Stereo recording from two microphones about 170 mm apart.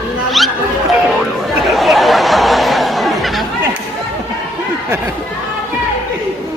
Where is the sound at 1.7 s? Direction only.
Centre (ahead or behind).